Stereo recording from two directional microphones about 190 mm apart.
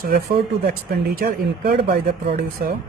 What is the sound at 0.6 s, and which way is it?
Speech, 55° right (ahead or behind).